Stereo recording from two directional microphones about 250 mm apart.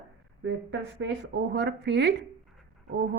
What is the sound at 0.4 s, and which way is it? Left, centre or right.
A woman's voice, right.